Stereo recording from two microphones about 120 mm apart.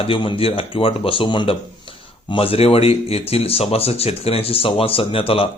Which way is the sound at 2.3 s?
50° left (ahead or behind).